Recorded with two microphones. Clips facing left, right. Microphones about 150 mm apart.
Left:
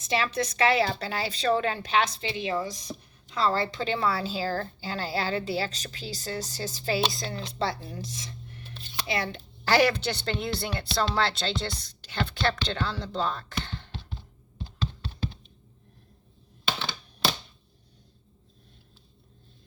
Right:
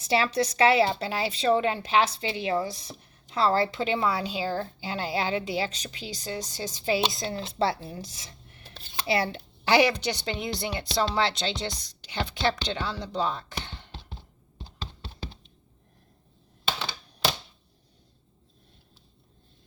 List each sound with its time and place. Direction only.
0.0 s speech: 30° right (ahead or behind)
9.6 s speech: 15° right (ahead or behind)